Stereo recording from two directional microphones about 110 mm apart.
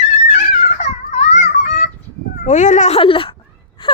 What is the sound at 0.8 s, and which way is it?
Babbling, 85° left.